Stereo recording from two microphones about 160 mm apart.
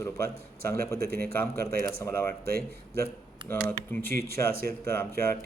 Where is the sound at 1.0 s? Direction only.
75° right (ahead or behind).